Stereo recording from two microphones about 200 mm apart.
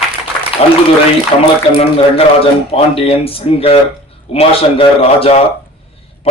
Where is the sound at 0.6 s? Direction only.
30° left (ahead or behind).